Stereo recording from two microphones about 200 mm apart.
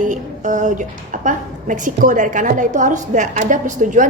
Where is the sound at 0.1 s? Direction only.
40° right (ahead or behind).